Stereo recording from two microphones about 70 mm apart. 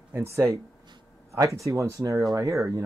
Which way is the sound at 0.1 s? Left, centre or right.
Right.